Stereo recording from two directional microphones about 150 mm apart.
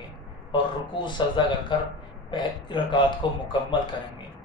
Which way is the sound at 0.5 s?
30° left (ahead or behind).